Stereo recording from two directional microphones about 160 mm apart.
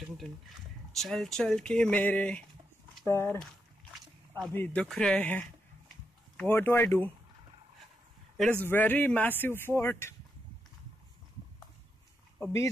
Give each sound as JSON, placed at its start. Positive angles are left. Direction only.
{"t": 0.9, "sound": "speech", "side_deg": 0}
{"t": 4.5, "sound": "speech", "side_deg": 10}
{"t": 8.4, "sound": "speech", "side_deg": 10}